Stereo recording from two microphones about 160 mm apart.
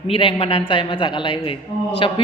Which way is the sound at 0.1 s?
35° left (ahead or behind).